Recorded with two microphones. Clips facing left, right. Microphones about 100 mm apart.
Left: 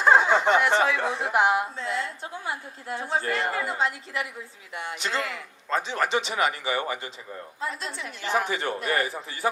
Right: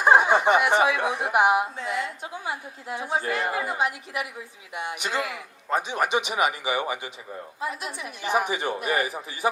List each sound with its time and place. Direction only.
0.0 s a man's voice: 15° right (ahead or behind)